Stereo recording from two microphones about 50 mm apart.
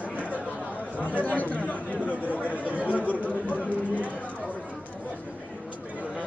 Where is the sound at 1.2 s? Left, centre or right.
Left.